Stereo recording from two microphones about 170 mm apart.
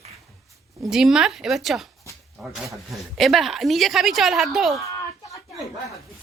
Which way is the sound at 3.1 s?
Centre (ahead or behind).